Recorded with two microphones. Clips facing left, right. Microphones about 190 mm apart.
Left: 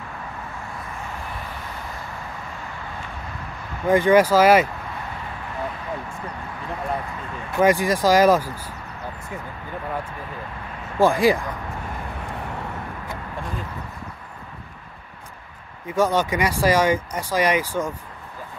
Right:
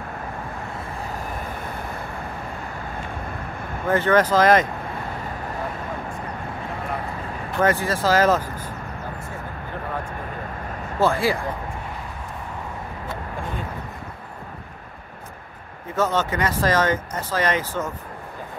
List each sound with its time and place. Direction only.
3.8 s speech: 15° left (ahead or behind)
7.5 s speech: 15° left (ahead or behind)
11.0 s speech: 15° left (ahead or behind)
15.9 s speech: 10° left (ahead or behind)